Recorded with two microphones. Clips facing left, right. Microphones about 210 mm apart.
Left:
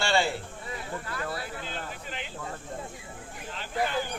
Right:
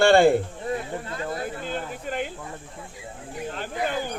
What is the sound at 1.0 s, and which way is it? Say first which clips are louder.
Speech: right 4 dB; 25° right (ahead or behind).